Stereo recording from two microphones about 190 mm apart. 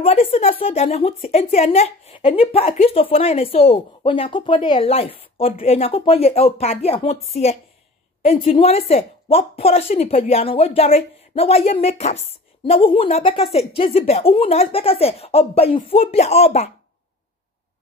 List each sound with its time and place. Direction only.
0.0 s a woman's voice: 30° left (ahead or behind)